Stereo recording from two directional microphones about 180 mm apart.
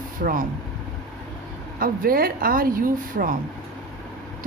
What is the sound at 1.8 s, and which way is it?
Speech, 55° right (ahead or behind).